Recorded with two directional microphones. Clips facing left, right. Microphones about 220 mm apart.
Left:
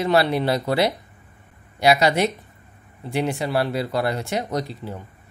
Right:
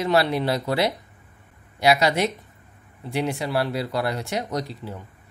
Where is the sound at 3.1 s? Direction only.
50° left (ahead or behind).